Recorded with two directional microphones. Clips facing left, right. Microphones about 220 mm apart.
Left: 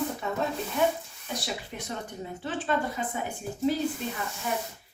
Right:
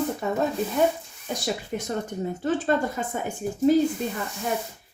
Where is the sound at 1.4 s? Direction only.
45° right (ahead or behind).